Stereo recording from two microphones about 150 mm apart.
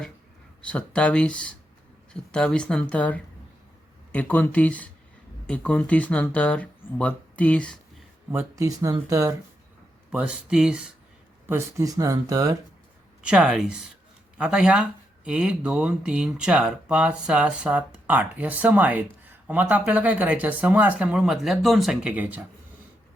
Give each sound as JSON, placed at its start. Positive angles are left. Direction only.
{"t": 0.6, "sound": "speech", "side_deg": 10}
{"t": 8.3, "sound": "speech", "side_deg": -20}
{"t": 10.1, "sound": "speech", "side_deg": -5}
{"t": 11.4, "sound": "speech", "side_deg": -20}
{"t": 13.2, "sound": "speech", "side_deg": -5}